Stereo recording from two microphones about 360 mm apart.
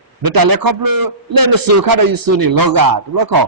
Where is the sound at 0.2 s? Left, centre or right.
Right.